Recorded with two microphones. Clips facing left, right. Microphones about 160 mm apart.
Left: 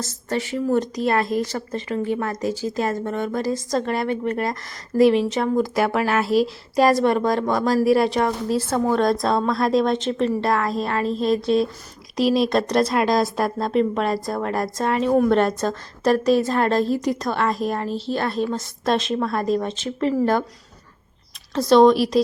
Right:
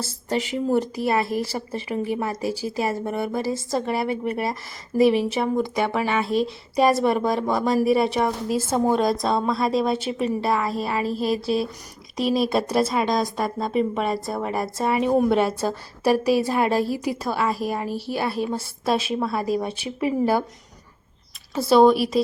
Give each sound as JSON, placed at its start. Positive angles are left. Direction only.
{"t": 0.0, "sound": "a woman's voice", "side_deg": -10}
{"t": 8.4, "sound": "a woman's voice", "side_deg": -20}
{"t": 9.0, "sound": "a woman's voice", "side_deg": 0}
{"t": 21.5, "sound": "a woman's voice", "side_deg": -5}